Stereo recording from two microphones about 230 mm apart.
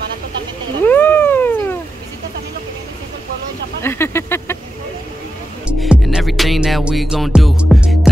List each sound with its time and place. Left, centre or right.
0.8 s cat: centre
3.8 s a sound: centre
5.7 s music: centre